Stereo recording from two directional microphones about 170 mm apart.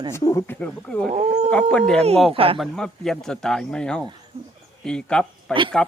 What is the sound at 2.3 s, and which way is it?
Speech, 35° right (ahead or behind).